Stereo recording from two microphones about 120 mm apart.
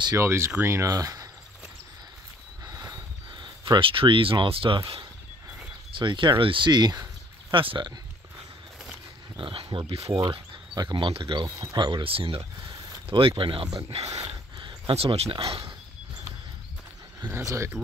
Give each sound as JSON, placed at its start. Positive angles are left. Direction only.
{"t": 0.2, "sound": "speech", "side_deg": -20}
{"t": 2.6, "sound": "a sound", "side_deg": -30}
{"t": 3.8, "sound": "speech", "side_deg": -45}
{"t": 9.4, "sound": "speech", "side_deg": -45}
{"t": 10.3, "sound": "speech", "side_deg": -35}
{"t": 11.4, "sound": "speech", "side_deg": -35}
{"t": 12.7, "sound": "a sound", "side_deg": -35}
{"t": 13.4, "sound": "speech", "side_deg": -45}
{"t": 13.8, "sound": "speech", "side_deg": -55}
{"t": 14.2, "sound": "a sound", "side_deg": -45}
{"t": 17.3, "sound": "speech", "side_deg": -25}